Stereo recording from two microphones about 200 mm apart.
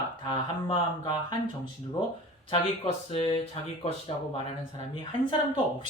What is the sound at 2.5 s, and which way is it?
Speech, 30° left (ahead or behind).